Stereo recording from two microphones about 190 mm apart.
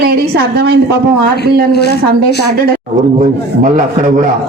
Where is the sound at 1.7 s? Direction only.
60° left (ahead or behind).